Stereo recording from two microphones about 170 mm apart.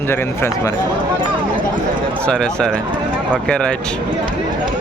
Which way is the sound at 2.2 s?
5° left (ahead or behind).